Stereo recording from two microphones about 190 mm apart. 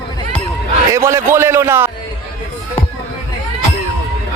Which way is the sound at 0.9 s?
15° right (ahead or behind).